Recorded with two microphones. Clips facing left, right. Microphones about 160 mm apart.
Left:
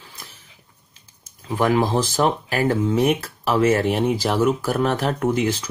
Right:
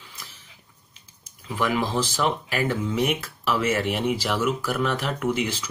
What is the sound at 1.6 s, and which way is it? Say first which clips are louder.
Speech: left 5 dB; 40° left (ahead or behind).